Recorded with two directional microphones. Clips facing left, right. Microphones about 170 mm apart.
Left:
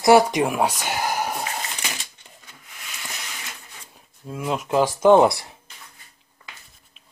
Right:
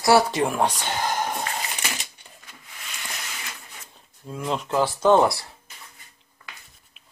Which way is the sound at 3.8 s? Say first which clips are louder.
Left 3 dB; 5° left (ahead or behind).